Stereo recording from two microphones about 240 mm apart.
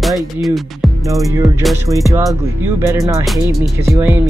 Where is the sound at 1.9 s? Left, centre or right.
Centre.